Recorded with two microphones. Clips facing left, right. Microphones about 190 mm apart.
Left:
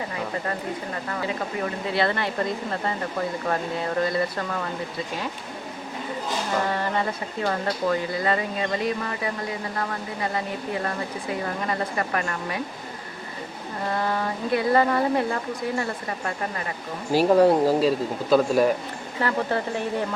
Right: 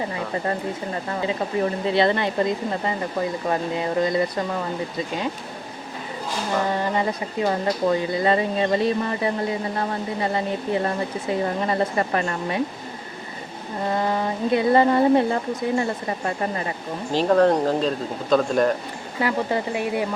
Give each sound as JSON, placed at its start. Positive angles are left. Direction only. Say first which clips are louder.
{"t": 1.1, "sound": "speech", "louder": "right 5 dB", "side_deg": -25}
{"t": 6.7, "sound": "speech", "louder": "right 3 dB", "side_deg": -15}
{"t": 13.8, "sound": "speech", "louder": "right 3 dB", "side_deg": -20}
{"t": 17.1, "sound": "speech", "louder": "left 1 dB", "side_deg": 10}
{"t": 19.2, "sound": "speech", "louder": "right 2 dB", "side_deg": -10}